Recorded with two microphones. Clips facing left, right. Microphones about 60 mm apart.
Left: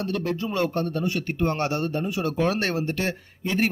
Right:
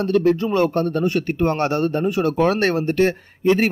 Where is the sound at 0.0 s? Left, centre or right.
Right.